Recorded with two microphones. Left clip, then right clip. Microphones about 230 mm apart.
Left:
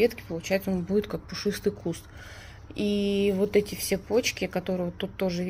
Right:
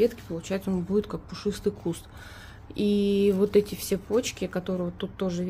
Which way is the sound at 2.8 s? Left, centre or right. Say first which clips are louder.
Right 2 dB; centre.